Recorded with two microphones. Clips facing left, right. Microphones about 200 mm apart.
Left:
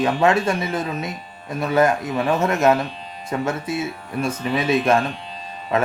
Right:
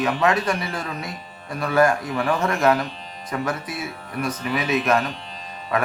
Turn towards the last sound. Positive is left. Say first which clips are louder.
# left 3 dB
turn(degrees=25)  # may be behind; listen again after turning